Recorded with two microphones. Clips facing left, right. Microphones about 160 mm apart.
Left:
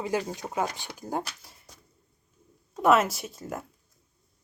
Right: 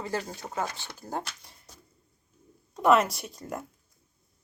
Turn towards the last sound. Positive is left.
turn(degrees=0)  # may be behind; listen again after turning